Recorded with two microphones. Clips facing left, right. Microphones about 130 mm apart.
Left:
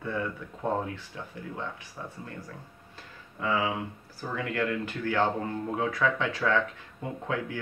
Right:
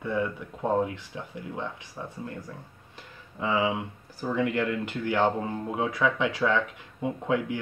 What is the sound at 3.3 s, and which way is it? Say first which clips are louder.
Speech: right 2 dB; 20° right (ahead or behind).